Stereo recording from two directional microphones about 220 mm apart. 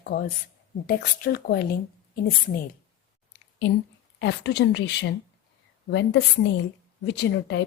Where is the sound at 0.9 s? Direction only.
45° left (ahead or behind).